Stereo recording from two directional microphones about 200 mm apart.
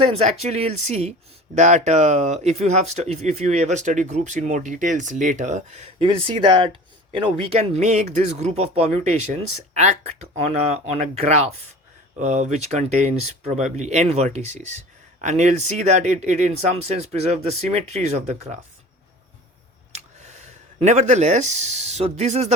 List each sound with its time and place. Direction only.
0.1 s speech: 30° right (ahead or behind)
19.9 s speech: 35° right (ahead or behind)